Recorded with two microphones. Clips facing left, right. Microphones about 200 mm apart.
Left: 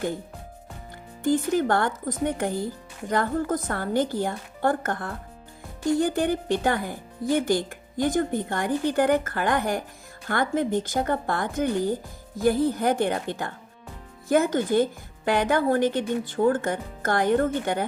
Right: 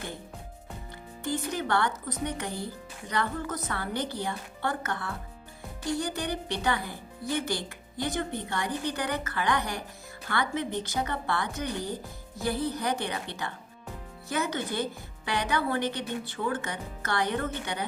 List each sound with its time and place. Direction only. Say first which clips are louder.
1.3 s speech: left 8 dB; 45° left (ahead or behind)